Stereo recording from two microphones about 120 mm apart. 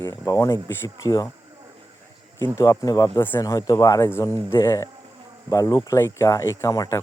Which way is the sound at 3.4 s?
30° left (ahead or behind).